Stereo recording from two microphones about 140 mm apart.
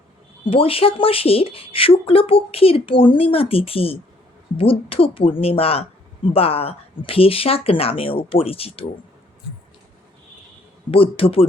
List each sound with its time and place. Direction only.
0.5 s speech: 40° left (ahead or behind)
10.9 s speech: 40° left (ahead or behind)